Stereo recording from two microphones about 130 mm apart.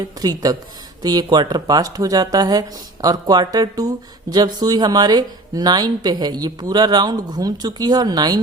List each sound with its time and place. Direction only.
0.2 s speech: 30° right (ahead or behind)